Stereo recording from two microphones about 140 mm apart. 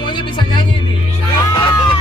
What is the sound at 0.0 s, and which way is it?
Music, 35° left (ahead or behind).